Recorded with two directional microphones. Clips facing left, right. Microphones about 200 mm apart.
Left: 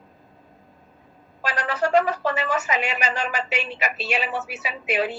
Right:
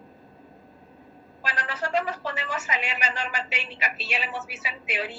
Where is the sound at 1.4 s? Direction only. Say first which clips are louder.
Left 7 dB; 80° left.